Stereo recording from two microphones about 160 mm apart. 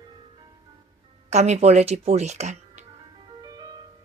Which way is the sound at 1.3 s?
45° right (ahead or behind).